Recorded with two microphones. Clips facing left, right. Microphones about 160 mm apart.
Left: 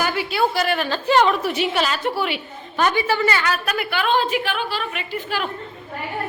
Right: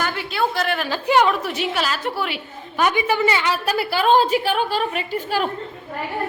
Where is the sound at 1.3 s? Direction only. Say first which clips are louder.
Left 2 dB; centre (ahead or behind); by 5.5 s 40° right (ahead or behind).